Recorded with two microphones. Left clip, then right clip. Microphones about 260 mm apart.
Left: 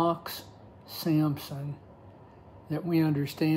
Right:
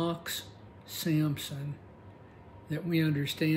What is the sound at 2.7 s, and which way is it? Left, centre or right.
Speech, centre.